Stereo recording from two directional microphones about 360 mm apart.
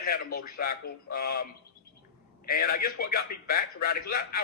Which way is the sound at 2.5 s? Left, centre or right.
Left.